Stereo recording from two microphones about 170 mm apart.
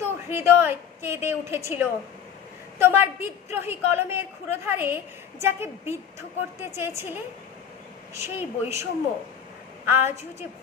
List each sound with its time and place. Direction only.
0.0 s a woman's voice: 15° right (ahead or behind)